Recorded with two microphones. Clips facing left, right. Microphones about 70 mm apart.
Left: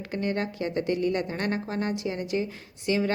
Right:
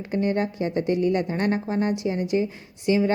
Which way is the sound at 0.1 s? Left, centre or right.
Right.